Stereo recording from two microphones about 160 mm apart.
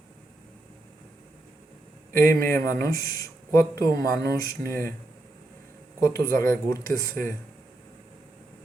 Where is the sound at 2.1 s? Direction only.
15° left (ahead or behind).